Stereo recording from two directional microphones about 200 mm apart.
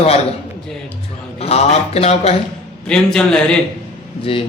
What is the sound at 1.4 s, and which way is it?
Speech, 30° left (ahead or behind).